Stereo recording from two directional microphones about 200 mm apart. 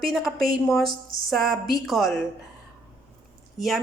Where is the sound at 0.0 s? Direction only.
Centre (ahead or behind).